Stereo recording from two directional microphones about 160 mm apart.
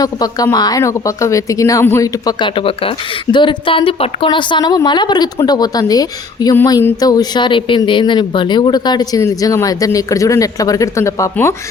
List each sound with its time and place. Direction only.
0.0 s speech: 25° left (ahead or behind)